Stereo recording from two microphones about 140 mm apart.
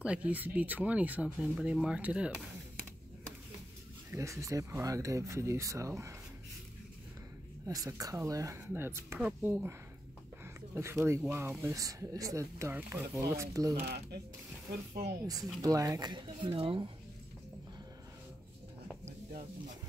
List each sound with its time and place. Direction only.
0.0 s speech: 10° right (ahead or behind)
4.1 s speech: 20° right (ahead or behind)
7.6 s speech: 25° right (ahead or behind)
15.2 s speech: 25° right (ahead or behind); by 16.9 s 40° right (ahead or behind)